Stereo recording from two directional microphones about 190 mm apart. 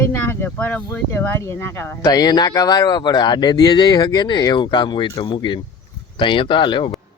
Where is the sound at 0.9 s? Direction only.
10° left (ahead or behind).